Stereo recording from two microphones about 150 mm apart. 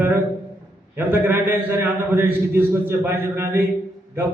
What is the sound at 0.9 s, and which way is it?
A man's voice, 15° right (ahead or behind).